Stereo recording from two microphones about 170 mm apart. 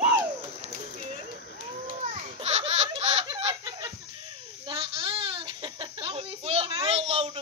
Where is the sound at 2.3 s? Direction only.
40° right (ahead or behind).